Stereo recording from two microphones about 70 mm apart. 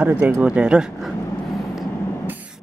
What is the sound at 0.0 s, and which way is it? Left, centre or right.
Speech, right.